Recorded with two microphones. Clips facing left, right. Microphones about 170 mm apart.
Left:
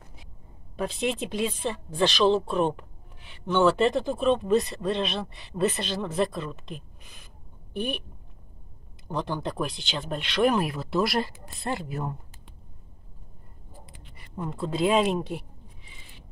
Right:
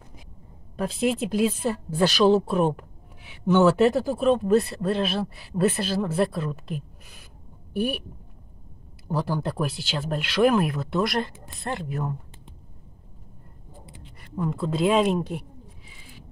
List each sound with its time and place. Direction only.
0.7 s speech: centre (ahead or behind)
9.0 s speech: 5° right (ahead or behind)
13.8 s a sound: 25° right (ahead or behind)
14.1 s speech: centre (ahead or behind)